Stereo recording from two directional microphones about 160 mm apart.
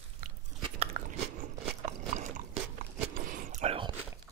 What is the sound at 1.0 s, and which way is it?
Biting, 60° right (ahead or behind).